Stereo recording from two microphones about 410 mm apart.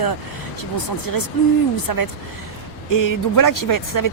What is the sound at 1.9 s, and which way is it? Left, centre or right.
Speech, left.